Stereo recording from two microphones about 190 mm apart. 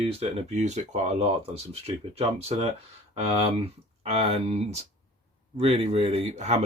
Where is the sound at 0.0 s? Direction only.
30° right (ahead or behind).